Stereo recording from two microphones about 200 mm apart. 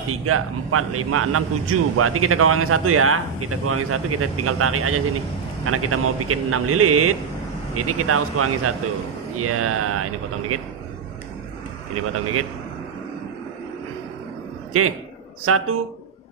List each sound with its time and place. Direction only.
0.1 s a man's voice: 90° right
11.9 s a man's voice: 90° right
14.7 s a man's voice: 90° right